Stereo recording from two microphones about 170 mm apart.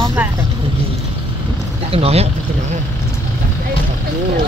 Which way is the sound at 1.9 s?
35° right (ahead or behind).